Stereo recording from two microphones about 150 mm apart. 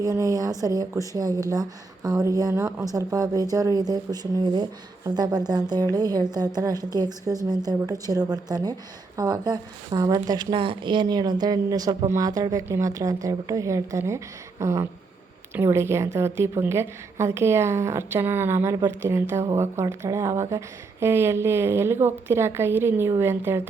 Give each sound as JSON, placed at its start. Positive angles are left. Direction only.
{"t": 0.0, "sound": "speech", "side_deg": -25}